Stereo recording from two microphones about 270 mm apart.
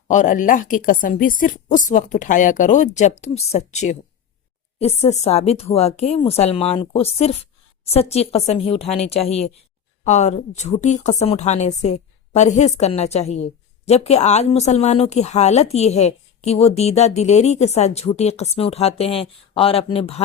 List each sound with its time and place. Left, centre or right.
0.1 s a woman's voice: left